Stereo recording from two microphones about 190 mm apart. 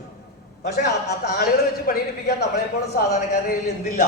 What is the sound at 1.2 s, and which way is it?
Speech, 55° left (ahead or behind).